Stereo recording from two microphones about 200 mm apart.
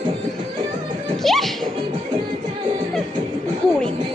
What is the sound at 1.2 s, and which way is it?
Music, centre (ahead or behind).